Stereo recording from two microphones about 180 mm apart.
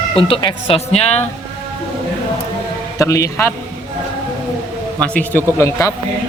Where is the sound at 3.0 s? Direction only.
15° left (ahead or behind).